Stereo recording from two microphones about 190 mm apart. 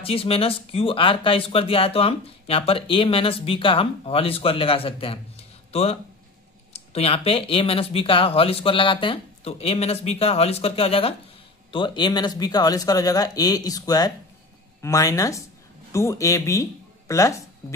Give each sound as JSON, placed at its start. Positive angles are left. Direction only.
{"t": 0.0, "sound": "speech", "side_deg": 30}